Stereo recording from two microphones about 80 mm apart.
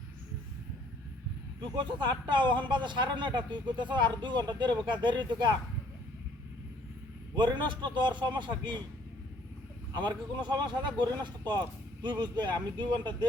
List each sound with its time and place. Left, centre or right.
1.7 s speech: right
7.3 s speech: right
9.9 s speech: right